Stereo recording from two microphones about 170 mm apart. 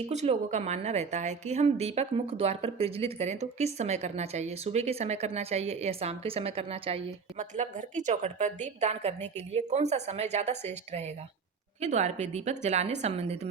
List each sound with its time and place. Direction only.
0.0 s a woman's voice: 40° right (ahead or behind)